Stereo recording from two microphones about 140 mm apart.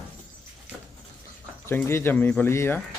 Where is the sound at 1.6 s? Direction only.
15° left (ahead or behind).